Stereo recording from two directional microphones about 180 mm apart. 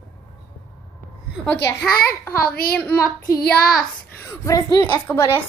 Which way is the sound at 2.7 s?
10° left (ahead or behind).